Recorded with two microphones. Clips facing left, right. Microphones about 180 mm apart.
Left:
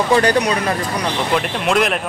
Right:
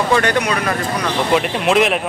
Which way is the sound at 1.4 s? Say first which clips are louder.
Right 2 dB; centre (ahead or behind).